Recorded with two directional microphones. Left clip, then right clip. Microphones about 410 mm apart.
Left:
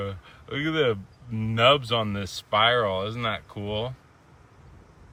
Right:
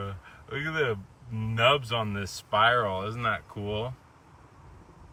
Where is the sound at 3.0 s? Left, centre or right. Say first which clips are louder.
Left 1 dB; centre.